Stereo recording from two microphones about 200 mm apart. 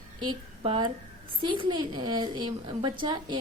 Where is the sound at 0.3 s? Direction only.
25° right (ahead or behind).